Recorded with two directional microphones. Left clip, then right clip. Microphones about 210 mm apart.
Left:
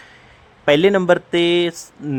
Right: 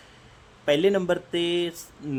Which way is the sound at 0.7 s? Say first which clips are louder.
Left 8 dB; 15° left (ahead or behind).